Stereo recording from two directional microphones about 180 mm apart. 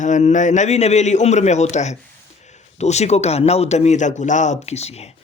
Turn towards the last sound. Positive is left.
turn(degrees=35)  # may be behind; listen again after turning